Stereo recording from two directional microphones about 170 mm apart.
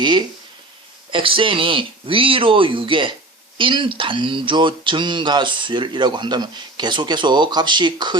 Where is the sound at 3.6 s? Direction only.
30° right (ahead or behind).